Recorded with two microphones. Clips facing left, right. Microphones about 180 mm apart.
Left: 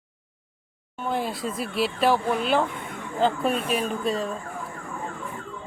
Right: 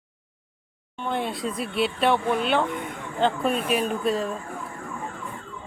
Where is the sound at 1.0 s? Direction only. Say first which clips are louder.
Even; centre (ahead or behind).